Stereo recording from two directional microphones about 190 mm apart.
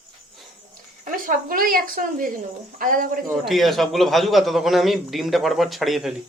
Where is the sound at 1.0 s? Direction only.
45° right (ahead or behind).